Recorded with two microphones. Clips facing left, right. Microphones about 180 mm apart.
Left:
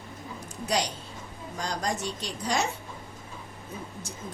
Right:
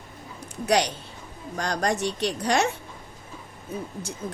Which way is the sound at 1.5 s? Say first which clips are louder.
Right 5 dB; 70° right (ahead or behind).